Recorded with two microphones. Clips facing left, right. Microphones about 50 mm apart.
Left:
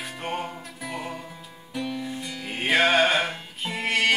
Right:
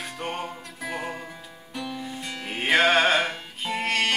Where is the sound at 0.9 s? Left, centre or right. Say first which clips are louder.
Right 1 dB; right.